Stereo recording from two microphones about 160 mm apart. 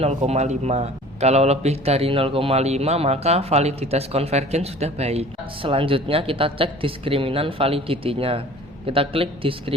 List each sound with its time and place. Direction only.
0.2 s a man's voice: 45° right (ahead or behind)